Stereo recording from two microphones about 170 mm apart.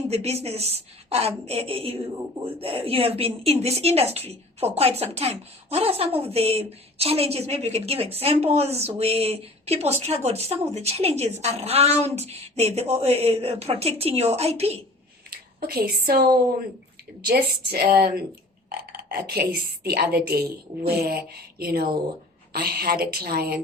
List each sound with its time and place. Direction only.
0.1 s a woman's voice: 35° right (ahead or behind)
15.3 s a woman's voice: 65° right (ahead or behind)